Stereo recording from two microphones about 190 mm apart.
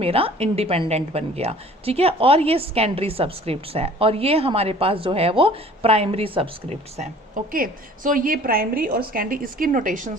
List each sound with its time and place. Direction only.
0.0 s a woman's voice: 30° right (ahead or behind)